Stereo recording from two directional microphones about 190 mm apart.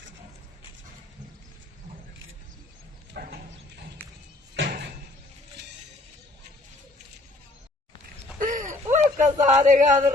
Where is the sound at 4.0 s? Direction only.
10° left (ahead or behind).